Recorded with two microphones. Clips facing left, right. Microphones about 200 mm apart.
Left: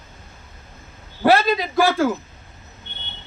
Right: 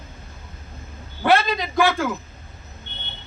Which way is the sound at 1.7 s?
40° left (ahead or behind).